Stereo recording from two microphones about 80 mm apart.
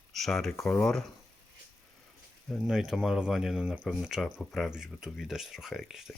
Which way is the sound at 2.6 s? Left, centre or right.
Centre.